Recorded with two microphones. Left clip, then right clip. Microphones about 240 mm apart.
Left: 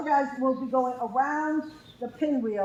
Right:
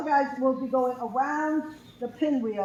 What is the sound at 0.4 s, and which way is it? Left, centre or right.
A man's voice, left.